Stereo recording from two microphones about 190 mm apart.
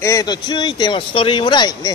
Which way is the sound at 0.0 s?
20° left (ahead or behind).